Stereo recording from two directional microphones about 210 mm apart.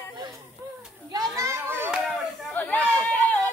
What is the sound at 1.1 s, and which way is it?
Children playing, 15° right (ahead or behind).